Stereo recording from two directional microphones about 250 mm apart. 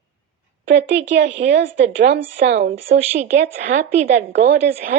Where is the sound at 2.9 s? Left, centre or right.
Right.